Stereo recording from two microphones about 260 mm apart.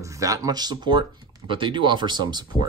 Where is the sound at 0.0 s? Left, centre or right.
Centre.